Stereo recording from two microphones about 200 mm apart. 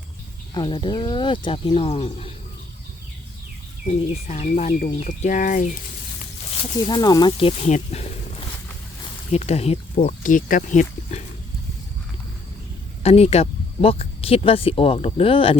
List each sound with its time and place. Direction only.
0.5 s speech: 25° left (ahead or behind)
3.8 s speech: 35° left (ahead or behind)
6.6 s speech: 20° left (ahead or behind); by 11.2 s 40° left (ahead or behind)
13.0 s speech: 30° left (ahead or behind)